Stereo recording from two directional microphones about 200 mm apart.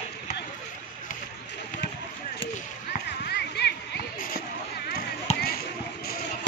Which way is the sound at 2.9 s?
50° left (ahead or behind).